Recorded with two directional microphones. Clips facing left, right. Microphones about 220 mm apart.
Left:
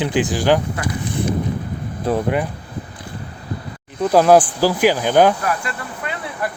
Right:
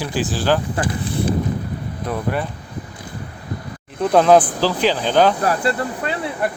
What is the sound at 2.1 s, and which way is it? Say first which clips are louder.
Speech: left 6 dB; 30° left (ahead or behind).